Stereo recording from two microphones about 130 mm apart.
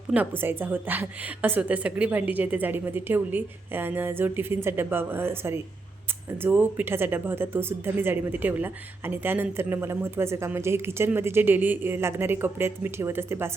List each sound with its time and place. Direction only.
0.1 s speech: 15° right (ahead or behind)